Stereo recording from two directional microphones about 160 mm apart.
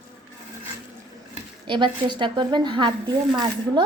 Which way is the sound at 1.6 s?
30° right (ahead or behind).